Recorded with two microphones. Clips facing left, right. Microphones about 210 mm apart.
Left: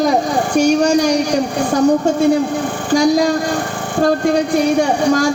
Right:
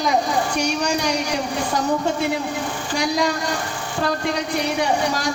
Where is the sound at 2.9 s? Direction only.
45° left (ahead or behind).